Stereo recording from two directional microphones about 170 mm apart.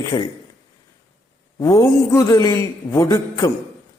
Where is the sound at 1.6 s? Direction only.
20° left (ahead or behind).